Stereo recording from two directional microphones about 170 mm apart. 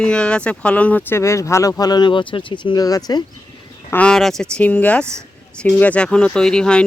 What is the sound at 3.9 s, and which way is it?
Speech, 5° left (ahead or behind).